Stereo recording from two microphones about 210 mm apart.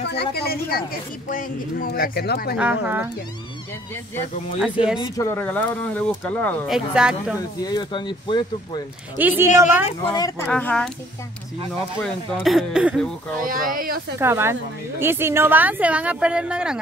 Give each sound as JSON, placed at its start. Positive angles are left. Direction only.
{"t": 0.1, "sound": "speech", "side_deg": 50}
{"t": 2.5, "sound": "a woman's voice", "side_deg": -5}
{"t": 5.0, "sound": "speech", "side_deg": 15}
{"t": 6.9, "sound": "speech", "side_deg": -5}
{"t": 7.3, "sound": "speech", "side_deg": 20}
{"t": 9.2, "sound": "a woman's voice", "side_deg": -10}
{"t": 9.8, "sound": "speech", "side_deg": 20}
{"t": 10.4, "sound": "speech", "side_deg": 5}
{"t": 12.0, "sound": "speech", "side_deg": 0}
{"t": 13.5, "sound": "speech", "side_deg": -40}
{"t": 14.2, "sound": "a woman's voice", "side_deg": -10}